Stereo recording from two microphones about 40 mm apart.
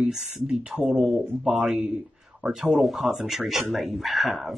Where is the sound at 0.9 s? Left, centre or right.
Centre.